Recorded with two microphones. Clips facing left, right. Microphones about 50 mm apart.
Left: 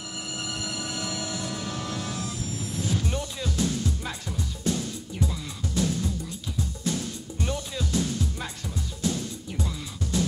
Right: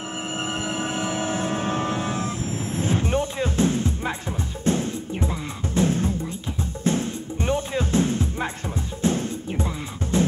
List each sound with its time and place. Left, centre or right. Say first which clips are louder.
0.4 s music: right 7 dB; right